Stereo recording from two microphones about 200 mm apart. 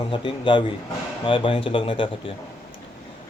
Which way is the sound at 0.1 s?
25° left (ahead or behind).